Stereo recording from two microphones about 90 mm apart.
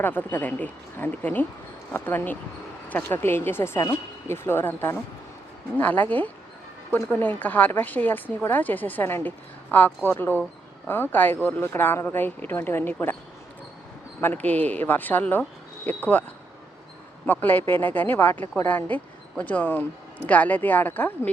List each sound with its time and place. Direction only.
0.0 s speech: 20° left (ahead or behind)
14.2 s speech: 20° left (ahead or behind)
17.2 s speech: 20° left (ahead or behind)